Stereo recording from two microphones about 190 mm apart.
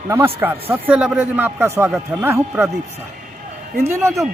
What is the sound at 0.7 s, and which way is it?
Speech, 5° right (ahead or behind).